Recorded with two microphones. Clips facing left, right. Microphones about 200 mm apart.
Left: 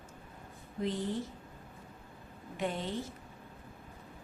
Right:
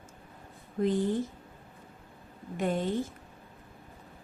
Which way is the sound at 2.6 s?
50° right (ahead or behind).